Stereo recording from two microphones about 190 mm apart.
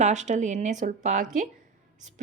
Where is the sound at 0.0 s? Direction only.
40° right (ahead or behind).